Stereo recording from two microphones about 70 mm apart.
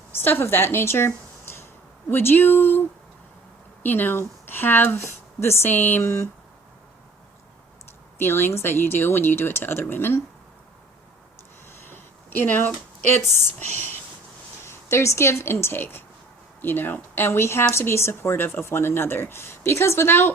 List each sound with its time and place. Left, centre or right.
0.1 s speech: left
3.8 s speech: left
6.0 s speech: left
8.2 s speech: left
11.9 s a sound: left
14.6 s speech: left